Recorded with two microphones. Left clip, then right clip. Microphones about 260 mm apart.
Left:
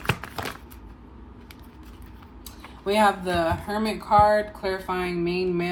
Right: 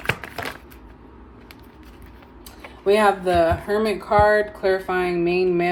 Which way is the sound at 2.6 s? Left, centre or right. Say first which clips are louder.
Right 3 dB; centre.